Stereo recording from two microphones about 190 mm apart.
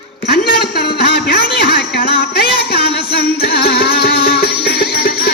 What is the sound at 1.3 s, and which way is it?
Music, 55° left (ahead or behind).